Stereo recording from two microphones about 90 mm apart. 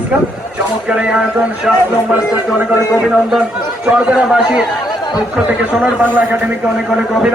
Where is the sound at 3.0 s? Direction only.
5° right (ahead or behind).